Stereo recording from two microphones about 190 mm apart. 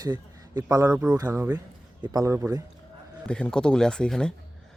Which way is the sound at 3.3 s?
5° left (ahead or behind).